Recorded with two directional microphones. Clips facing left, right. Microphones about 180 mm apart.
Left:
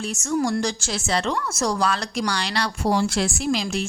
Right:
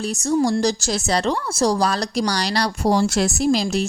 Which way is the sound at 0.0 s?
35° right (ahead or behind).